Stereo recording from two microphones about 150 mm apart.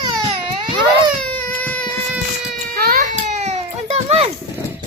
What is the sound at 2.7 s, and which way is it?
Baby cry, 90° right.